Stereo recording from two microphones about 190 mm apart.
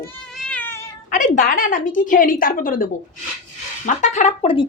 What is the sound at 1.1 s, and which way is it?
A woman's voice, 40° left (ahead or behind).